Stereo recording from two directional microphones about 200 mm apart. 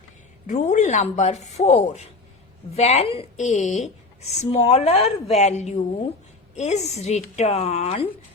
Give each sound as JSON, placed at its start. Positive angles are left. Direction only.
{"t": 0.4, "sound": "a woman's voice", "side_deg": 40}